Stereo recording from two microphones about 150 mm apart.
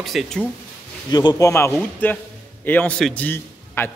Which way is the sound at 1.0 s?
30° left (ahead or behind).